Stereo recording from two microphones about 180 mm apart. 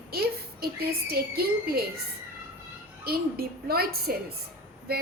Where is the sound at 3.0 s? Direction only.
60° right (ahead or behind).